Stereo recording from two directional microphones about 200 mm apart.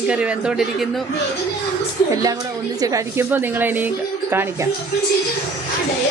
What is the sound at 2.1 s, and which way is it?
A woman's voice, 20° right (ahead or behind).